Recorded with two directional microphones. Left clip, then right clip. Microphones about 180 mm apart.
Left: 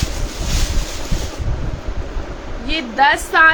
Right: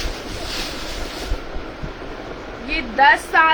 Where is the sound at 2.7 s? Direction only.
35° left (ahead or behind).